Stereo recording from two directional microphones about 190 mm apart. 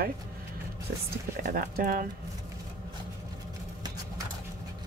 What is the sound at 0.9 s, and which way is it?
Speech, 55° right (ahead or behind).